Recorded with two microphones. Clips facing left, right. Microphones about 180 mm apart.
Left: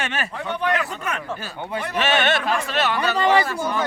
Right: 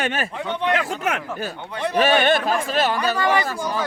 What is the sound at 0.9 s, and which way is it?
Speech, 90° right.